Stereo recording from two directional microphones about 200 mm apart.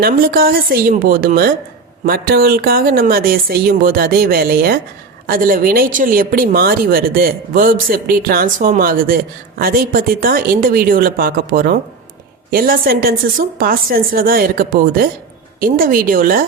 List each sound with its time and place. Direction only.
0.0 s speech: 45° right (ahead or behind)